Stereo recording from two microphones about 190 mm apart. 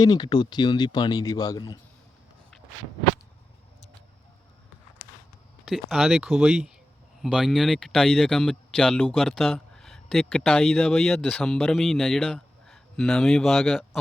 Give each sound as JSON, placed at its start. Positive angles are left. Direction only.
{"t": 0.0, "sound": "a man's voice", "side_deg": 20}
{"t": 5.6, "sound": "speech", "side_deg": 0}